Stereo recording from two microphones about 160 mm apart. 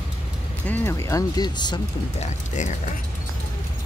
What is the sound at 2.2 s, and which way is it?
Speech, 50° left (ahead or behind).